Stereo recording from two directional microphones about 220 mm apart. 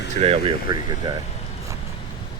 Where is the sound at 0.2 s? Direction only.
25° right (ahead or behind).